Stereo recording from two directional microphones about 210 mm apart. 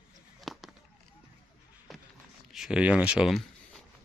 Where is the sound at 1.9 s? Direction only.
Centre (ahead or behind).